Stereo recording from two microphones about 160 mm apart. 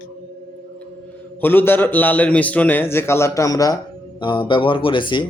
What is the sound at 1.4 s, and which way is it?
A man's voice, 15° left (ahead or behind).